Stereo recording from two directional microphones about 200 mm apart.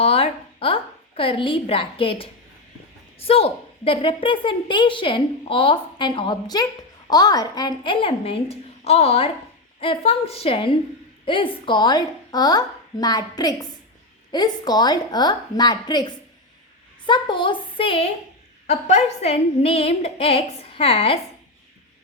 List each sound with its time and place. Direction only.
0.0 s a woman's voice: 30° left (ahead or behind)